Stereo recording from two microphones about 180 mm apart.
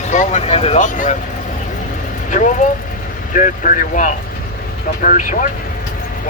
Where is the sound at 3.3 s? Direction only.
45° left (ahead or behind).